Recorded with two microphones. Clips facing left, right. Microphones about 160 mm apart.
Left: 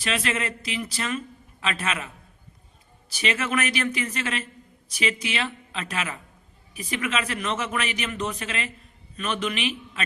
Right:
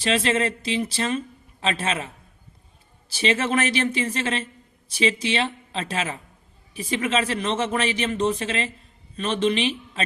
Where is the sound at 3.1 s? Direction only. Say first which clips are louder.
Right 4 dB; 30° right (ahead or behind).